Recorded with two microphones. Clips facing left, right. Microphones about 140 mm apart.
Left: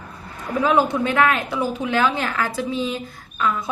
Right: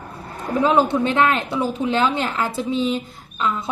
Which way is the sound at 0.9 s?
25° right (ahead or behind).